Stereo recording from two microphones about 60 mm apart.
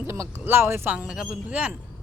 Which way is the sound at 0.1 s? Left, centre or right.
Right.